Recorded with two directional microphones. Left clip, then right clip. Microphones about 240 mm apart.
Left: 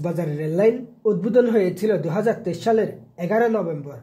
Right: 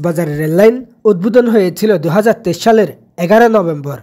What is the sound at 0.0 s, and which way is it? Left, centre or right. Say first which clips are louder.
Speech: right 10 dB; right.